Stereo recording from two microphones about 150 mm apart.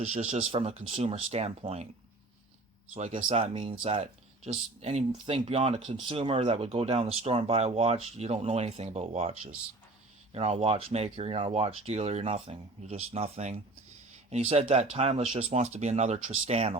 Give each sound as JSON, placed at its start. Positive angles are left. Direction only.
{"t": 0.0, "sound": "speech", "side_deg": -45}
{"t": 2.9, "sound": "speech", "side_deg": -50}
{"t": 3.2, "sound": "speech", "side_deg": -40}